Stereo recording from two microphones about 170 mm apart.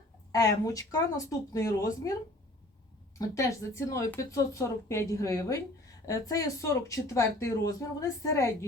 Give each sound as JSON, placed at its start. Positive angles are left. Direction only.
{"t": 0.3, "sound": "speech", "side_deg": 20}
{"t": 3.2, "sound": "speech", "side_deg": 20}